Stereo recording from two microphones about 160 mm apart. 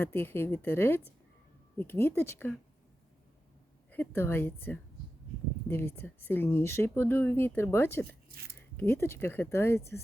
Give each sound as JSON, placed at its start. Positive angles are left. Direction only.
{"t": 0.0, "sound": "speech", "side_deg": 15}
{"t": 3.9, "sound": "speech", "side_deg": 10}
{"t": 8.3, "sound": "speech", "side_deg": -75}
{"t": 8.7, "sound": "speech", "side_deg": 15}